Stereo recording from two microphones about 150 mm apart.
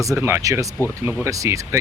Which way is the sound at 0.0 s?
20° right (ahead or behind).